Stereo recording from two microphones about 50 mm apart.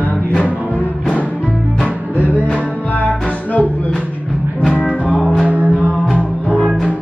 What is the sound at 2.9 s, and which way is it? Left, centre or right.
Music, left.